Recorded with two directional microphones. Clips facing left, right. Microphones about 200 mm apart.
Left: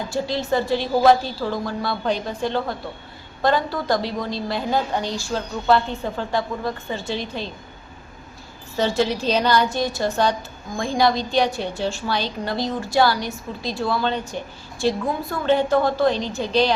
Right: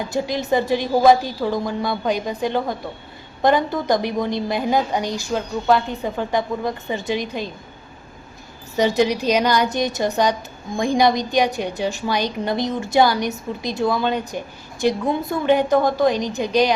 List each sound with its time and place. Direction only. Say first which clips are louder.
0.1 s a woman's voice: right 2 dB; 15° right (ahead or behind)
8.7 s a woman's voice: right 3 dB; 15° right (ahead or behind)